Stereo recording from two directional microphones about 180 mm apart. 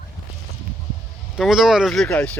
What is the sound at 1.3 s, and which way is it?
Speech, centre (ahead or behind).